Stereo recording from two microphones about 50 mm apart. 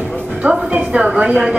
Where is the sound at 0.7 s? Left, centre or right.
Right.